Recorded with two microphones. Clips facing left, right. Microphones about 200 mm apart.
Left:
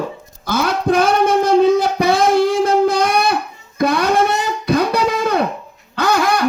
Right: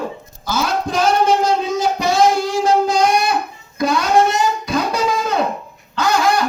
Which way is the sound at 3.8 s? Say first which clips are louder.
Left 2 dB; 60° left (ahead or behind).